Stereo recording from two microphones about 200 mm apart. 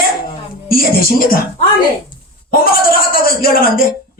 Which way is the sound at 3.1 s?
45° left (ahead or behind).